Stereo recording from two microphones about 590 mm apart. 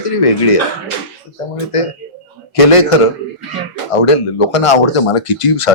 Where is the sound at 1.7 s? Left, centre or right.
Left.